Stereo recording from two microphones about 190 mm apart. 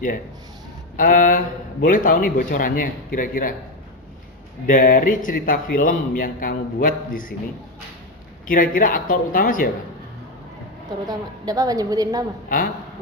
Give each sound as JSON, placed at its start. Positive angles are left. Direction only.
{"t": 0.9, "sound": "a man's voice", "side_deg": 45}
{"t": 4.6, "sound": "a man's voice", "side_deg": 45}
{"t": 8.4, "sound": "a man's voice", "side_deg": 45}
{"t": 11.0, "sound": "a woman's voice", "side_deg": -20}
{"t": 12.5, "sound": "a man's voice", "side_deg": 45}